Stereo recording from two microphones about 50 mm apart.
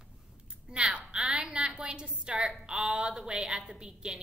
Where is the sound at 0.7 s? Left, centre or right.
Centre.